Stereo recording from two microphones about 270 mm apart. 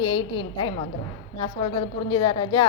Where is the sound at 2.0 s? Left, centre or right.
Centre.